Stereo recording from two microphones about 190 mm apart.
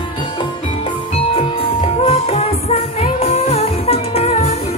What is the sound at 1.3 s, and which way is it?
Music, 30° left (ahead or behind).